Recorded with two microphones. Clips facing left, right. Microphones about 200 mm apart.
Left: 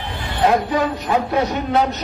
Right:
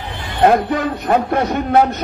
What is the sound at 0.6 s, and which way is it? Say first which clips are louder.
A man's voice: right 2 dB; 55° right (ahead or behind).